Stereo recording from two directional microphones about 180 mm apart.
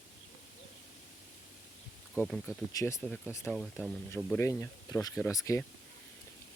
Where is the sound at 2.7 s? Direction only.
20° left (ahead or behind); by 3.9 s 5° left (ahead or behind).